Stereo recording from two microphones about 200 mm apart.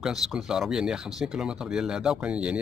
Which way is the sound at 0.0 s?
Centre (ahead or behind).